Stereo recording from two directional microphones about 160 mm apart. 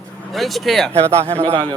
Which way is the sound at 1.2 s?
35° right (ahead or behind).